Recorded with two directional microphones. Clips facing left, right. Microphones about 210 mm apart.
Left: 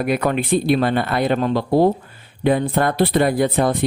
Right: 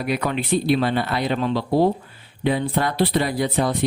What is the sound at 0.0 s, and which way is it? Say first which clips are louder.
Speech: left 4 dB; 50° left (ahead or behind).